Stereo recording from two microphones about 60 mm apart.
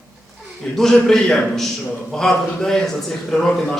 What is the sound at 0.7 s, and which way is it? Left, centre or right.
A man's voice, centre.